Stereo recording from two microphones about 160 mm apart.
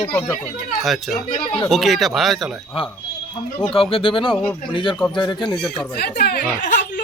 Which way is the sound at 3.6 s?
35° left (ahead or behind).